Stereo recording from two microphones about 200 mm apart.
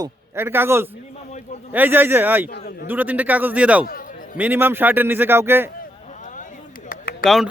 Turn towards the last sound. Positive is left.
turn(degrees=0)  # may be behind; listen again after turning